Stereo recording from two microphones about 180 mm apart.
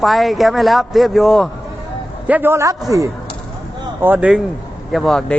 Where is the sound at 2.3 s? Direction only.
10° right (ahead or behind).